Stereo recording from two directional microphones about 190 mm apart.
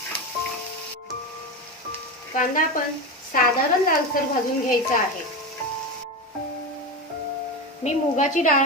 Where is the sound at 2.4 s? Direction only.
45° left (ahead or behind).